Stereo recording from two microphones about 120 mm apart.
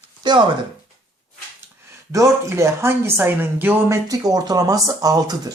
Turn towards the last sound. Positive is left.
turn(degrees=-30)  # may be behind; listen again after turning